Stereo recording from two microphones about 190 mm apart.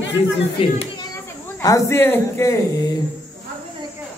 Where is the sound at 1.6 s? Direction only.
15° left (ahead or behind).